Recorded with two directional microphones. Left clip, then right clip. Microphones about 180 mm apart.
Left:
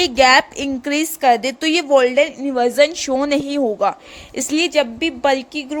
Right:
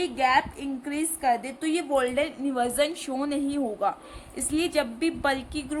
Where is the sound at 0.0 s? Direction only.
65° left (ahead or behind); by 3.2 s 35° left (ahead or behind).